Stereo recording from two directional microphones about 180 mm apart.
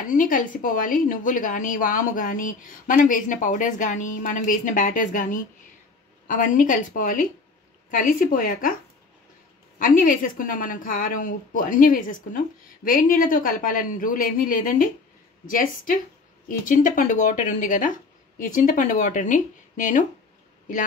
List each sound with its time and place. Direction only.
0.0 s a woman's voice: 45° left (ahead or behind)
9.8 s a woman's voice: 50° left (ahead or behind)